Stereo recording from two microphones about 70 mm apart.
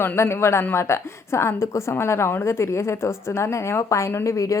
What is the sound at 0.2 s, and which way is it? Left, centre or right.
A woman's voice, left.